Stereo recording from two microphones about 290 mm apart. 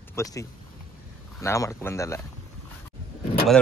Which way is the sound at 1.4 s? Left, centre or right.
Centre.